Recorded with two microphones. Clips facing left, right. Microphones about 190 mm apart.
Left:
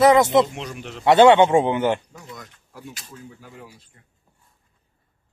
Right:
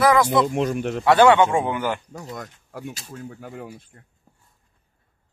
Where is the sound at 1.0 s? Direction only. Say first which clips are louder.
Left 2 dB; 20° left (ahead or behind).